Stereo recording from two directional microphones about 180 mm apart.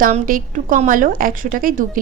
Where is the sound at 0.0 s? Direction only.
50° right (ahead or behind).